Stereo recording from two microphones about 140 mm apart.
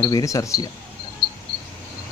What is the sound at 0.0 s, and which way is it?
Speech, 25° left (ahead or behind).